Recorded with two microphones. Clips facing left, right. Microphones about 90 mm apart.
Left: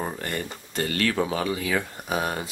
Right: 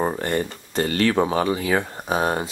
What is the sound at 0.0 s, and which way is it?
Speech, 30° right (ahead or behind).